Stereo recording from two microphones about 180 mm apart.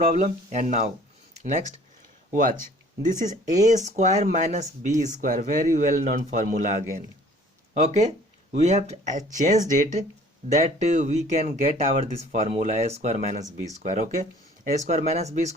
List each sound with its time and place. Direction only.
0.1 s speech: 45° right (ahead or behind)
3.1 s speech: 45° right (ahead or behind)